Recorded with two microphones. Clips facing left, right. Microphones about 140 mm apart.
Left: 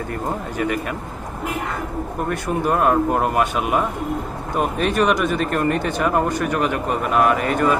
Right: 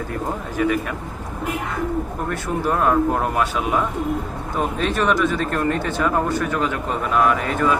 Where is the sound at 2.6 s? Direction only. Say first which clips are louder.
Even; 10° left (ahead or behind).